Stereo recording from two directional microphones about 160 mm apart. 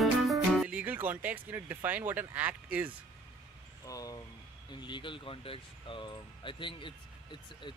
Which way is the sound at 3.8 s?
20° left (ahead or behind).